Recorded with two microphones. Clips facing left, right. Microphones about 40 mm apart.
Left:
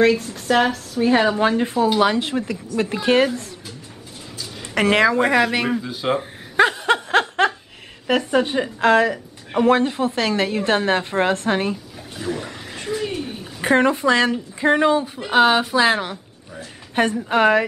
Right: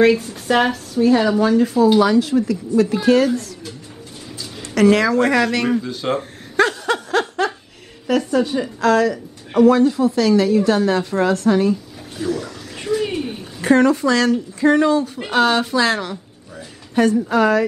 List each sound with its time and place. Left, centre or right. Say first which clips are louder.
0.0 s speech: right 2 dB; centre
1.0 s a woman's voice: right 2 dB; left
4.7 s speech: right 2 dB; left; by 6.2 s centre
6.5 s a sound: left 1 dB; left
7.1 s laughter: left 1 dB; left
8.1 s a woman's voice: right 1 dB; left
12.3 s speech: right 3 dB; left
13.0 s a sound: right 3 dB; centre
13.6 s speech: right 3 dB; left